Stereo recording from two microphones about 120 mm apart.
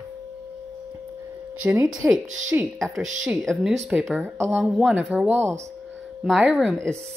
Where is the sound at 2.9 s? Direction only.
5° right (ahead or behind).